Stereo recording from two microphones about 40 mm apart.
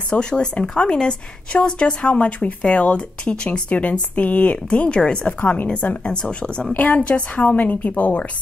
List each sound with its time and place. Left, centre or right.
0.1 s speech: left
3.7 s speech: left
6.8 s speech: left